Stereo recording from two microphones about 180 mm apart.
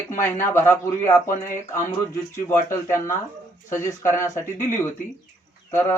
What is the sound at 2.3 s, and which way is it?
Speech, 15° left (ahead or behind).